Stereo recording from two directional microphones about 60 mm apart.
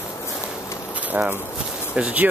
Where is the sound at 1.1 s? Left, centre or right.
Right.